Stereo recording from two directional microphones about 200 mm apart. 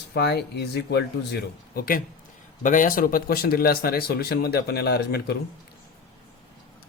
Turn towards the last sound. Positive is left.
turn(degrees=55)  # may be behind; listen again after turning